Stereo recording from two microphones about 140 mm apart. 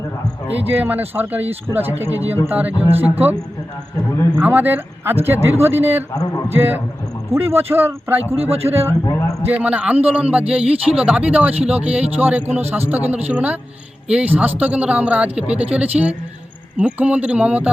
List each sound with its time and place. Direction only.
0.6 s a woman's voice: 15° right (ahead or behind)
4.4 s a woman's voice: 15° right (ahead or behind)
8.4 s speech: 45° right (ahead or behind)
8.6 s a woman's voice: 15° right (ahead or behind)
8.9 s speech: 20° left (ahead or behind)
9.5 s a woman's voice: 10° right (ahead or behind)